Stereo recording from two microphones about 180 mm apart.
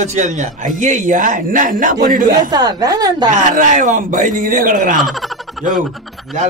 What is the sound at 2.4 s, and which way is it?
Speech, 20° right (ahead or behind).